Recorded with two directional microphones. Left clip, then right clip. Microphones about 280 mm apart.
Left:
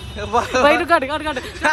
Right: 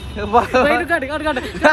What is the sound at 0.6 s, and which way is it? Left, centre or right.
Speech, centre.